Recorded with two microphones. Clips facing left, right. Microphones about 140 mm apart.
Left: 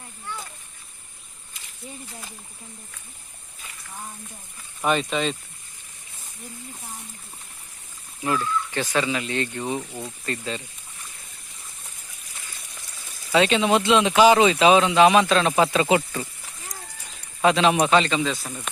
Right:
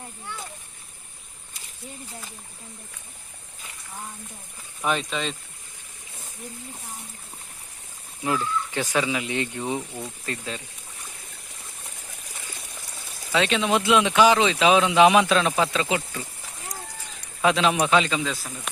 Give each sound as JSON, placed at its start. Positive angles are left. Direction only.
{"t": 4.8, "sound": "speech", "side_deg": 5}
{"t": 8.2, "sound": "speech", "side_deg": -10}
{"t": 13.3, "sound": "speech", "side_deg": 5}
{"t": 15.9, "sound": "speech", "side_deg": 65}
{"t": 17.4, "sound": "speech", "side_deg": 0}